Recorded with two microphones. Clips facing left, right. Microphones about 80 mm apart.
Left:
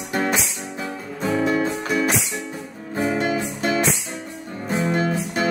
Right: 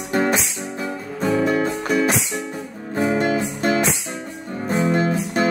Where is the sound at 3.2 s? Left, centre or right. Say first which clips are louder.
Right 2 dB; right.